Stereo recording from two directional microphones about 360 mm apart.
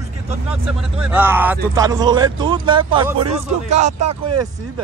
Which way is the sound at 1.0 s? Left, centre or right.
Centre.